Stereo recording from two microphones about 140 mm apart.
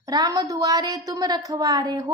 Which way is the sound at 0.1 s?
30° right (ahead or behind).